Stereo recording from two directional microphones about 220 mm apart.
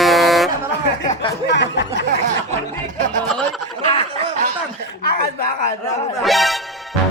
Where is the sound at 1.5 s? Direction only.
55° left (ahead or behind).